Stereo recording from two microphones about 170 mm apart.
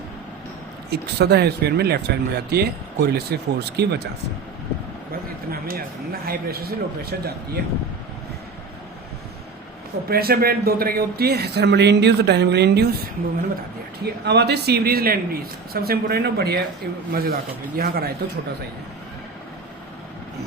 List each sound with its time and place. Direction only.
0.9 s speech: 75° right (ahead or behind)
5.5 s a man's voice: 60° right (ahead or behind)
10.1 s speech: 65° right (ahead or behind)
14.0 s a man's voice: 75° right (ahead or behind)